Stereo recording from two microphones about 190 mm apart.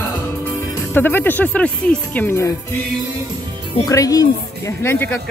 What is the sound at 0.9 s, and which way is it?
Speech, 10° left (ahead or behind).